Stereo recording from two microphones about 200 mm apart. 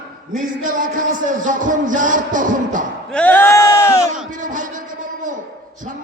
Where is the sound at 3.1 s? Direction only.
10° left (ahead or behind).